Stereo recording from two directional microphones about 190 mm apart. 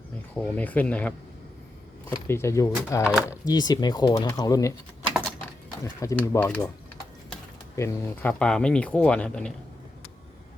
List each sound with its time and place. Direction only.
0.3 s speech: 10° left (ahead or behind)
2.1 s speech: 15° left (ahead or behind)
3.0 s speech: 5° right (ahead or behind)
3.2 s speech: 20° left (ahead or behind)
5.8 s speech: 15° left (ahead or behind)
7.8 s speech: 15° left (ahead or behind)